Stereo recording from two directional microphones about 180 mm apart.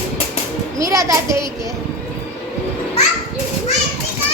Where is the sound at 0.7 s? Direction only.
20° right (ahead or behind).